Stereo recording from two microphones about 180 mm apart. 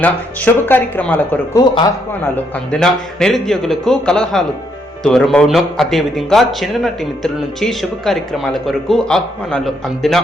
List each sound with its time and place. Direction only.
0.0 s a man's voice: 10° left (ahead or behind)